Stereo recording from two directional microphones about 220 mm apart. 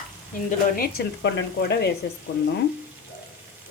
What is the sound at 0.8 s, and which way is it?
Speech, 45° left (ahead or behind).